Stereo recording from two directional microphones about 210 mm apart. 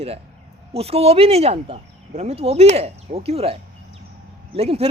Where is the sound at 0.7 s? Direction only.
30° right (ahead or behind).